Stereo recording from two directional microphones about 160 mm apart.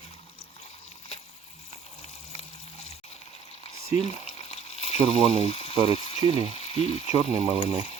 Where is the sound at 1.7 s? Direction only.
40° left (ahead or behind).